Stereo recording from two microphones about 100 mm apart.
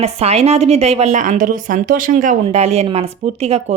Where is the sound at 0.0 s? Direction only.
90° right.